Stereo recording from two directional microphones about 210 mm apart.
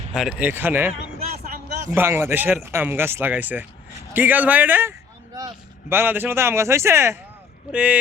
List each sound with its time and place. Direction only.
0.1 s speech: 5° right (ahead or behind)
1.5 s a sound: 45° right (ahead or behind)
1.9 s speech: 10° right (ahead or behind)